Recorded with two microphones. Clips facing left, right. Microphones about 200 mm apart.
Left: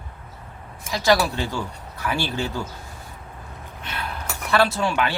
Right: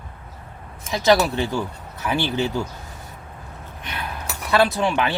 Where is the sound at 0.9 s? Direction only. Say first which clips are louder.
Right 2 dB; 20° right (ahead or behind).